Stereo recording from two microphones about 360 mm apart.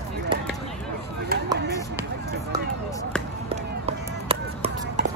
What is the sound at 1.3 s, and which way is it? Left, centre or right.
Chop, right.